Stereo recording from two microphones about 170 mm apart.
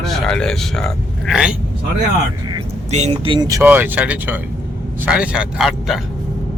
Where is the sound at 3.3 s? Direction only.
20° right (ahead or behind).